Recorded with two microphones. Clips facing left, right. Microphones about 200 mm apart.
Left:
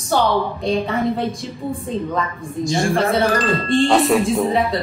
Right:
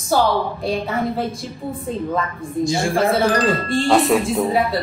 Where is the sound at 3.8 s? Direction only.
Centre (ahead or behind).